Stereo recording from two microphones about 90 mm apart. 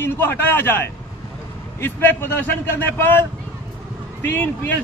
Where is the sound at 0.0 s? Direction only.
25° left (ahead or behind).